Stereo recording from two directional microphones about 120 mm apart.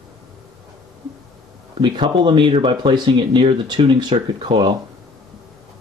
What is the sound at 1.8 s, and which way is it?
Speech, 45° right (ahead or behind).